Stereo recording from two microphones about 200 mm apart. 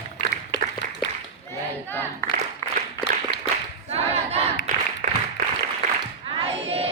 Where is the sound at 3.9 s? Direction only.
30° right (ahead or behind).